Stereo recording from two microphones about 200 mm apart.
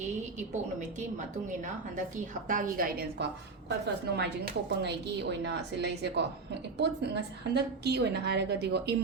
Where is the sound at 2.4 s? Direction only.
40° right (ahead or behind).